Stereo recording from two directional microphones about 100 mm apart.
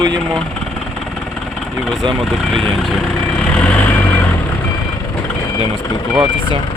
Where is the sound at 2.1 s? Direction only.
5° left (ahead or behind).